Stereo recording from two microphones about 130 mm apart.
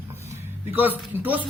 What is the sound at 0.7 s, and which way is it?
Speech, 15° right (ahead or behind).